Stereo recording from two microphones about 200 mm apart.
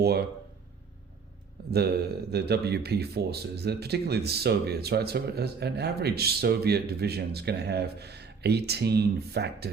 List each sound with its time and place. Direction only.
1.7 s speech: 50° right (ahead or behind)